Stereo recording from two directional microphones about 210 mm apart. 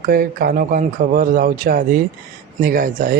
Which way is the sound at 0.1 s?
45° right (ahead or behind).